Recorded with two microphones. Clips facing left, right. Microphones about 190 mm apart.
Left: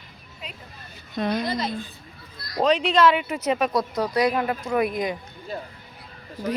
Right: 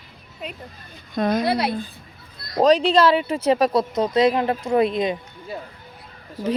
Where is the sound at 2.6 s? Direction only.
40° right (ahead or behind).